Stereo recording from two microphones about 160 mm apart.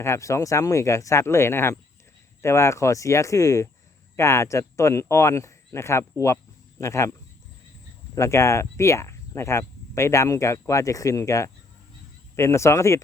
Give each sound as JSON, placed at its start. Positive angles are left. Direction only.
{"t": 0.0, "sound": "speech", "side_deg": 20}